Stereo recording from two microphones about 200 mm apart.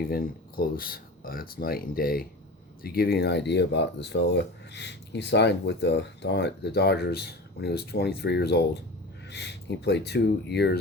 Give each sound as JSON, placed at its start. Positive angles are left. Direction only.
{"t": 0.1, "sound": "speech", "side_deg": 45}